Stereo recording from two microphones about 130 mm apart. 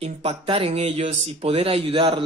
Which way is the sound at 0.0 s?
50° right (ahead or behind).